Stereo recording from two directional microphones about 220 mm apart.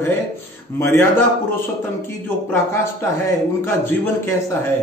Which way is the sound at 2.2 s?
10° left (ahead or behind).